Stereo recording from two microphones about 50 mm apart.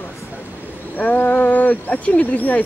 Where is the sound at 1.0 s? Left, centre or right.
Left.